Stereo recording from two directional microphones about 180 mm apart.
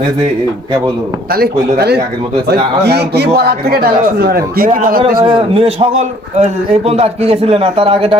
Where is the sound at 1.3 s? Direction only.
60° right (ahead or behind).